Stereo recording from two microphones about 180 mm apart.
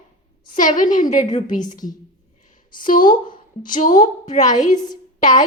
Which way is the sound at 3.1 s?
25° left (ahead or behind).